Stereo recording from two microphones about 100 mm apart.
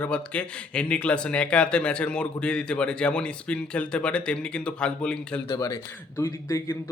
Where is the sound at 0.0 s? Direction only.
10° left (ahead or behind).